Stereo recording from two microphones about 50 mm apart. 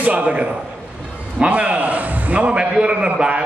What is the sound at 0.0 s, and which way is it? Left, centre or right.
A man's voice, right.